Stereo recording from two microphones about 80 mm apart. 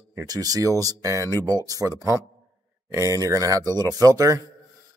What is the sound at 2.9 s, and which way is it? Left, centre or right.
Speech, right.